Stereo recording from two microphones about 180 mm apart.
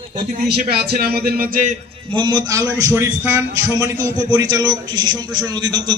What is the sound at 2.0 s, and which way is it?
A man's voice, 25° right (ahead or behind).